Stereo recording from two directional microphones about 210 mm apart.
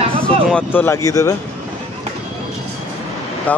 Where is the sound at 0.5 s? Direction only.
10° left (ahead or behind).